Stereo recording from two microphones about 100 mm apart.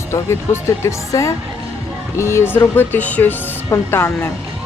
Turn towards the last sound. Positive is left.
turn(degrees=25)  # may be behind; listen again after turning